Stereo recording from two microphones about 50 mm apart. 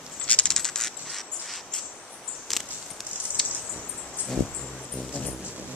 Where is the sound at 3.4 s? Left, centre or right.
Centre.